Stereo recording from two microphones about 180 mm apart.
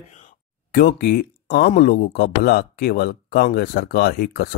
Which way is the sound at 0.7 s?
60° left (ahead or behind).